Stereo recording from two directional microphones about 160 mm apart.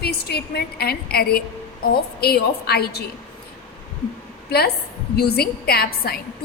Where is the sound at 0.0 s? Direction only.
80° left.